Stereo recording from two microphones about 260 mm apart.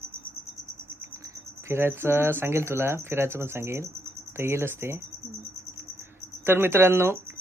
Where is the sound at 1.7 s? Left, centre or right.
Centre.